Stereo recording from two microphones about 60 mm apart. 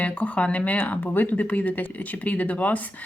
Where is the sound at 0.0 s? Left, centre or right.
Left.